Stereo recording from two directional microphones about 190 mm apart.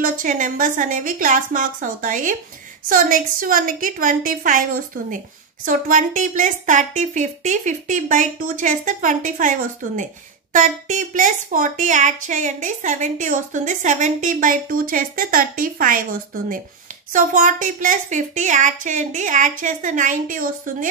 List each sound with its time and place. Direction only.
0.0 s a woman's voice: 45° right (ahead or behind)
17.1 s a woman's voice: 45° right (ahead or behind)